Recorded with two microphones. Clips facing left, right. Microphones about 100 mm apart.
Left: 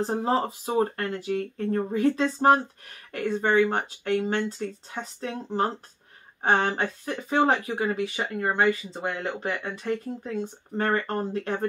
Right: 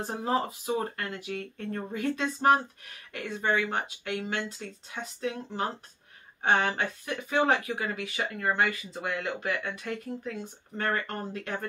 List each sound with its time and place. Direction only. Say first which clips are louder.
0.0 s speech: left 4 dB; 30° left (ahead or behind)
3.1 s speech: left 5 dB; 40° left (ahead or behind)